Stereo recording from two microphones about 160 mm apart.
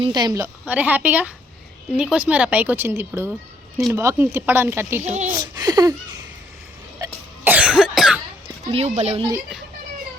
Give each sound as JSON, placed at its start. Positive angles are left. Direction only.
{"t": 0.0, "sound": "a woman's voice", "side_deg": -25}
{"t": 0.6, "sound": "speech", "side_deg": -10}
{"t": 7.0, "sound": "cough", "side_deg": -25}
{"t": 7.4, "sound": "cough", "side_deg": -10}
{"t": 8.6, "sound": "speech", "side_deg": -40}